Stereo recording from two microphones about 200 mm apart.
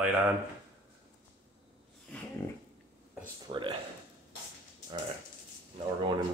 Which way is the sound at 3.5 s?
25° right (ahead or behind).